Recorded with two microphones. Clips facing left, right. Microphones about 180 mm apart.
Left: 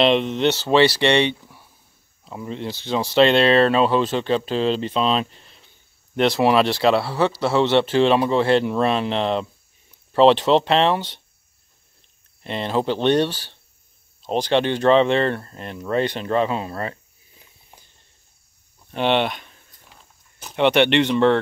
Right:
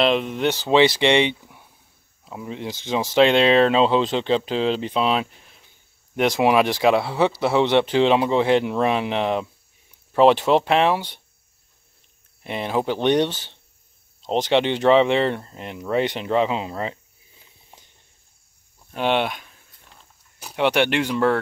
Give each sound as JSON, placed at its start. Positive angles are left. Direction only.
{"t": 0.0, "sound": "speech", "side_deg": -5}
{"t": 12.4, "sound": "speech", "side_deg": -10}
{"t": 18.9, "sound": "a sound", "side_deg": -5}
{"t": 20.3, "sound": "speech", "side_deg": -5}